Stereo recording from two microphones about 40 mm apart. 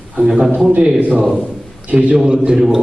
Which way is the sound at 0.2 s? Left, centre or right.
Right.